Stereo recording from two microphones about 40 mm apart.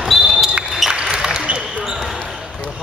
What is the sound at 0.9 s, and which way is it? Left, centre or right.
Basketball bounce, centre.